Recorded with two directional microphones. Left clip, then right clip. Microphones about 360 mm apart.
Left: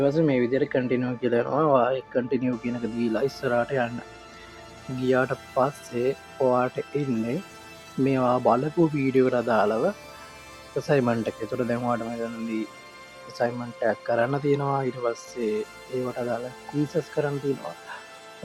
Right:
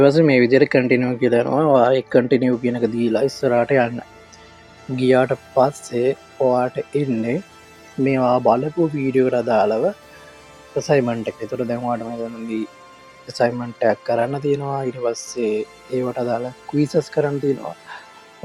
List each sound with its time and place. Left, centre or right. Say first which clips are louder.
0.0 s speech: right 9 dB; left
4.9 s speech: right 7 dB; left
13.2 s speech: right 8 dB; left
16.0 s speech: right 7 dB; left